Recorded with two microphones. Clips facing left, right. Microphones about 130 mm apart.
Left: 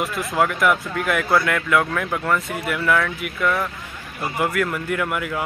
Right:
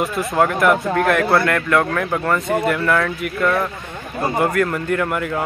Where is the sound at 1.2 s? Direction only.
70° right (ahead or behind).